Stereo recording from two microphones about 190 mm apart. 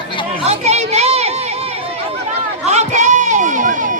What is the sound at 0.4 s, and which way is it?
Chatter, 35° right (ahead or behind).